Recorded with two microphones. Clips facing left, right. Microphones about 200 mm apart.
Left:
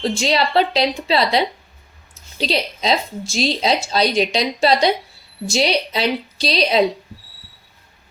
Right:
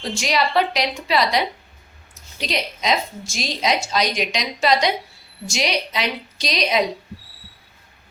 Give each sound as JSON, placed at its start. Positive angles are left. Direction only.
{"t": 0.2, "sound": "a woman's voice", "side_deg": 30}